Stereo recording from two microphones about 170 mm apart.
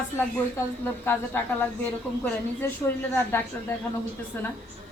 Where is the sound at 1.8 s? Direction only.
10° left (ahead or behind).